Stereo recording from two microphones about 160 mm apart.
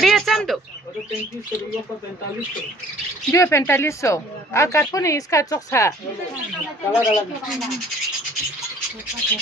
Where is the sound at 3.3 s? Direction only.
20° left (ahead or behind).